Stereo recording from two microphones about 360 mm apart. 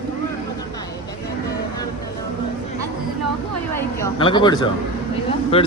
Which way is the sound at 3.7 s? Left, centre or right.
Centre.